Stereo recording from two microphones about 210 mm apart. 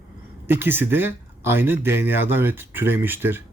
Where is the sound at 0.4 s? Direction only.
10° right (ahead or behind).